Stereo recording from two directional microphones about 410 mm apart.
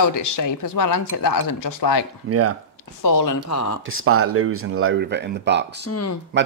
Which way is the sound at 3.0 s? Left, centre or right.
Left.